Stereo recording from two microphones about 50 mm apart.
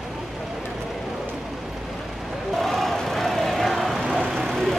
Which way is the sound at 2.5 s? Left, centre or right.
Centre.